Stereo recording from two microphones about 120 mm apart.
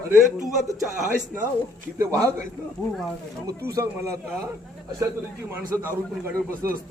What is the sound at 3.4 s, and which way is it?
Speech, 25° right (ahead or behind).